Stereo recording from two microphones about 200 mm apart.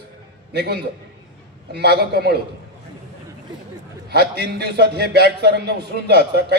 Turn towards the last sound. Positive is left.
turn(degrees=-55)  # may be behind; listen again after turning